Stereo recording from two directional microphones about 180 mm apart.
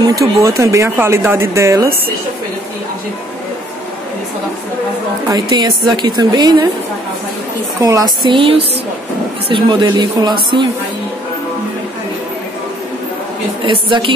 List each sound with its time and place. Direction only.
0.0 s speech: 20° right (ahead or behind)
5.3 s a woman's voice: 25° right (ahead or behind)
7.8 s a woman's voice: 20° right (ahead or behind)
13.7 s a woman's voice: 25° right (ahead or behind)